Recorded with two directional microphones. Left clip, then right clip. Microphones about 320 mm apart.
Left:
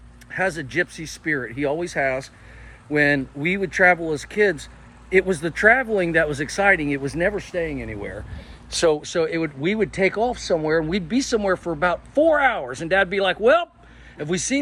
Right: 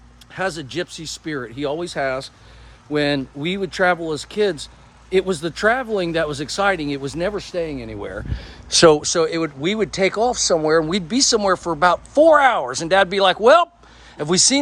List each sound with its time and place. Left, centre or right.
0.3 s speech: centre